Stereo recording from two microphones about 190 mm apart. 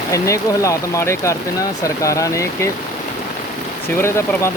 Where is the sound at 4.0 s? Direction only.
15° left (ahead or behind).